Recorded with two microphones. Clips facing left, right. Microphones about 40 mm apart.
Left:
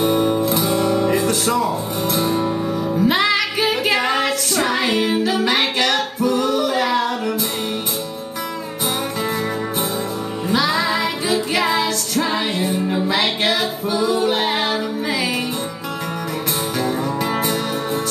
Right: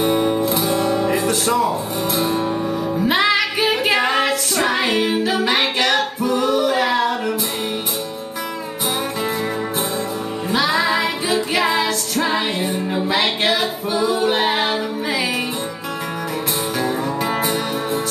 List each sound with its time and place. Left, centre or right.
0.0 s guitar: centre
3.0 s music: centre
10.5 s music: centre
16.8 s music: centre